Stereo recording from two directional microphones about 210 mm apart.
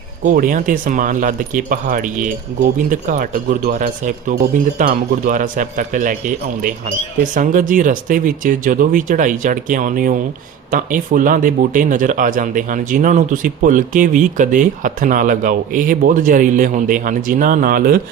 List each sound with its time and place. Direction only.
0.2 s speech: 40° right (ahead or behind)